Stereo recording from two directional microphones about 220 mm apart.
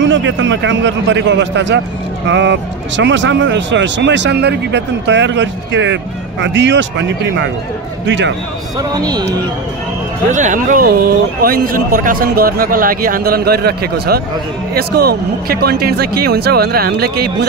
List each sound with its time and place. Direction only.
0.0 s speech: 55° right (ahead or behind)
8.9 s speech: 15° right (ahead or behind)
10.3 s speech: 35° right (ahead or behind)